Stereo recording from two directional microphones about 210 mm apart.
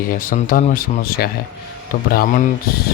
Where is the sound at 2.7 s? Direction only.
45° left (ahead or behind).